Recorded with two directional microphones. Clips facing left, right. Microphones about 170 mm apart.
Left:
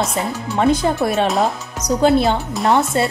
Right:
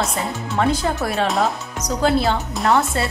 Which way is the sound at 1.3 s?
Centre (ahead or behind).